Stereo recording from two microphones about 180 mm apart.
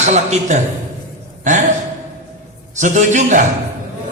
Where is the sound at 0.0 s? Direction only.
40° right (ahead or behind).